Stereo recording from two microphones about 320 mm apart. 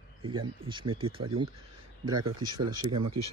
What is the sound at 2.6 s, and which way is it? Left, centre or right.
Speech, right.